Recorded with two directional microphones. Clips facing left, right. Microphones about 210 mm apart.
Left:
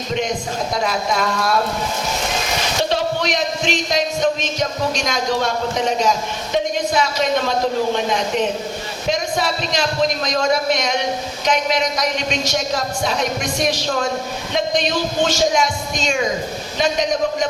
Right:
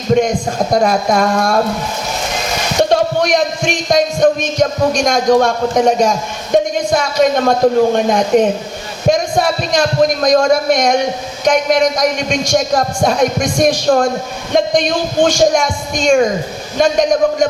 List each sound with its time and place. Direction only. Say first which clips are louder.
0.1 s a man's voice: right 10 dB; 45° right (ahead or behind)
2.9 s a man's voice: right 8 dB; 50° right (ahead or behind)